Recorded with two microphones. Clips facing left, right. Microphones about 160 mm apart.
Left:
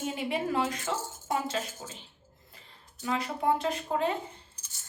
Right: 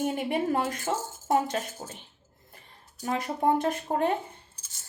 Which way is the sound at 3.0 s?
50° right (ahead or behind).